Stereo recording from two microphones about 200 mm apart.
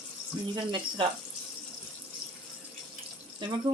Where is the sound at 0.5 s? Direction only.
25° right (ahead or behind).